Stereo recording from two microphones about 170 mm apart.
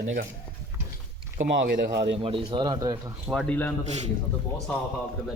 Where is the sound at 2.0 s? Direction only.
30° right (ahead or behind).